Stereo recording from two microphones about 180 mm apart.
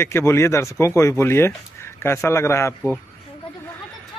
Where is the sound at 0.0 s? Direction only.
15° left (ahead or behind).